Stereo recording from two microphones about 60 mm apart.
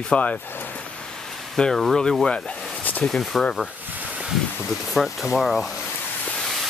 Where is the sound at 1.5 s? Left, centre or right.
Centre.